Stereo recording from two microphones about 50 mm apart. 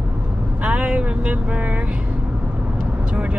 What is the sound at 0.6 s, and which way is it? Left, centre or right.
Speech, right.